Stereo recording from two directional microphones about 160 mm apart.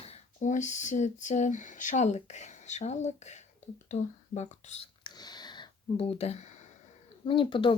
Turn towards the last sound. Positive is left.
turn(degrees=30)  # may be behind; listen again after turning